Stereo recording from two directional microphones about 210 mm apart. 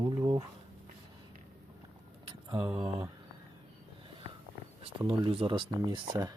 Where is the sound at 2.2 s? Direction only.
20° right (ahead or behind).